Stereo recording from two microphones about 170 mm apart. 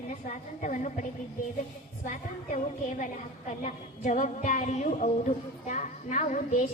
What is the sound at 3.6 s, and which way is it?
A woman's voice, 45° left (ahead or behind).